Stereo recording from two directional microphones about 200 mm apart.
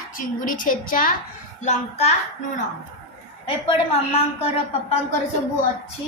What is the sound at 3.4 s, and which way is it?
A woman's voice, 30° left (ahead or behind).